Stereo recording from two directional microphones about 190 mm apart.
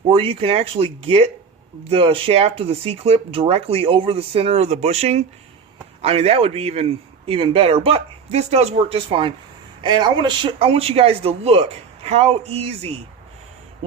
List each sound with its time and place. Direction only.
0.1 s a man's voice: 30° right (ahead or behind)